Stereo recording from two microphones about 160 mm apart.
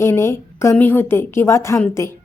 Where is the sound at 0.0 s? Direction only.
15° left (ahead or behind).